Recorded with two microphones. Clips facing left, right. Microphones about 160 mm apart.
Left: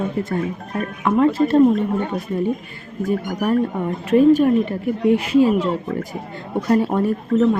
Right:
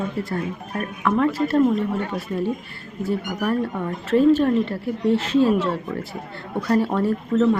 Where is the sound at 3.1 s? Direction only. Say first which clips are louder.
Left 3 dB; 15° left (ahead or behind).